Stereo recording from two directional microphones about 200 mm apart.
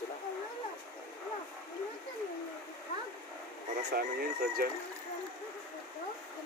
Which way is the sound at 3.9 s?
45° right (ahead or behind).